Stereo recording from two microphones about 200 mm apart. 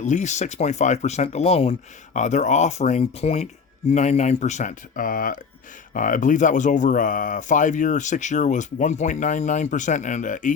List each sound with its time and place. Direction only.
0.0 s speech: 35° left (ahead or behind)